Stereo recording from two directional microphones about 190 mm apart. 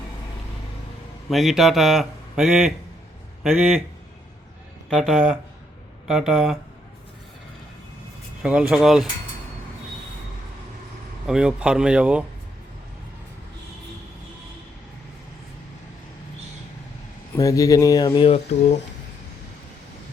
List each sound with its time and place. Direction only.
1.3 s a man's voice: centre (ahead or behind)
4.9 s a man's voice: centre (ahead or behind)
8.4 s a man's voice: 5° right (ahead or behind)
11.3 s a man's voice: 5° right (ahead or behind)
17.3 s speech: 15° left (ahead or behind)